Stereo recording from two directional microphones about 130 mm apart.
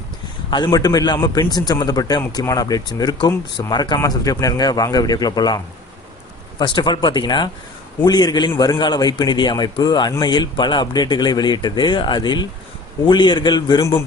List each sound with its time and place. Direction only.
0.5 s speech: 30° left (ahead or behind)
6.6 s speech: 35° left (ahead or behind)